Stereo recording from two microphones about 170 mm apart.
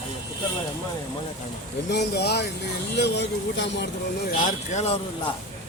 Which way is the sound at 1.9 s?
75° left (ahead or behind).